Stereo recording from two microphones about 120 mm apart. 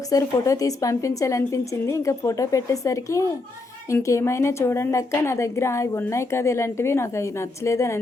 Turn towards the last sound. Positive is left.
turn(degrees=25)  # may be behind; listen again after turning